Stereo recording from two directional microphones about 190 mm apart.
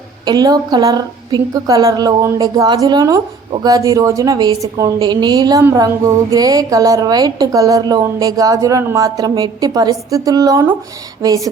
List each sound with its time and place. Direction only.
0.3 s a woman's voice: 20° right (ahead or behind)